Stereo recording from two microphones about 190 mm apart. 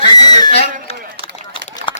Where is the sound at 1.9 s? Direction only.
25° left (ahead or behind).